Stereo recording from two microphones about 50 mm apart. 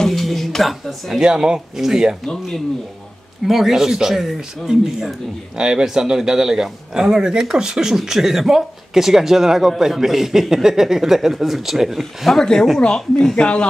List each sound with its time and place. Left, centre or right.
0.1 s music: centre
1.2 s a man's voice: centre
2.2 s a man's voice: centre
12.7 s speech: centre